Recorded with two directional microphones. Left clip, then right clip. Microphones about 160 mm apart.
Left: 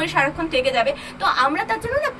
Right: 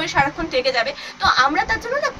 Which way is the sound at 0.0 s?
15° right (ahead or behind).